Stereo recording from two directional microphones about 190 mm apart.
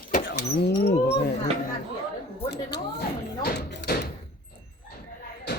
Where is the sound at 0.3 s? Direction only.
55° left (ahead or behind).